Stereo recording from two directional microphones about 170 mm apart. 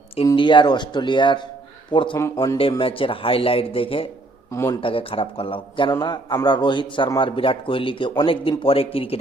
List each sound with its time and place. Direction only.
0.3 s a man's voice: 30° left (ahead or behind)
2.1 s speech: 20° left (ahead or behind)
2.6 s speech: 30° left (ahead or behind)
4.5 s speech: 15° left (ahead or behind)
4.8 s a man's voice: 30° left (ahead or behind)